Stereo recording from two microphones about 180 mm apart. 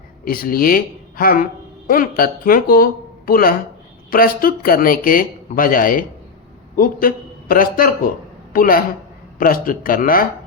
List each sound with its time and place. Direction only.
0.3 s a man's voice: 55° left (ahead or behind)